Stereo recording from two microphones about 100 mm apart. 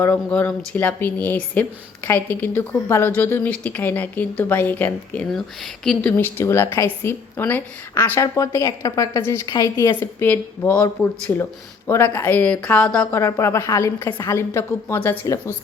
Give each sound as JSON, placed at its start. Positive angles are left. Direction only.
{"t": 0.0, "sound": "speech", "side_deg": 15}
{"t": 5.3, "sound": "speech", "side_deg": 5}
{"t": 6.0, "sound": "speech", "side_deg": 20}
{"t": 10.0, "sound": "speech", "side_deg": 20}
{"t": 11.9, "sound": "speech", "side_deg": 25}
{"t": 13.1, "sound": "speech", "side_deg": 25}